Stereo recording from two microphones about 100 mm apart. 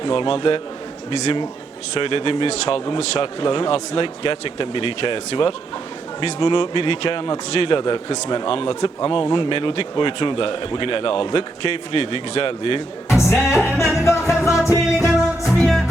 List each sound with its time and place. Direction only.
0.0 s a man's voice: 60° left (ahead or behind)
2.0 s a man's voice: 65° left (ahead or behind)
6.1 s a man's voice: 55° left (ahead or behind)
13.1 s music: 25° left (ahead or behind)
15.0 s music: centre (ahead or behind)